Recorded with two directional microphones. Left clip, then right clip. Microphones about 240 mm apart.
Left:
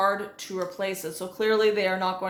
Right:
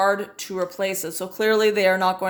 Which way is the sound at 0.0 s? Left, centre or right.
Right.